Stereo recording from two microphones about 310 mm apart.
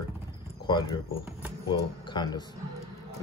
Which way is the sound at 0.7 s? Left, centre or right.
Centre.